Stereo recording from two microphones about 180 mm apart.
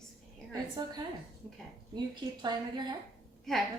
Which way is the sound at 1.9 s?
25° right (ahead or behind).